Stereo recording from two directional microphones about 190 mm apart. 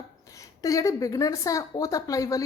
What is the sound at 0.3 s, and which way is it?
A woman's voice, 15° left (ahead or behind).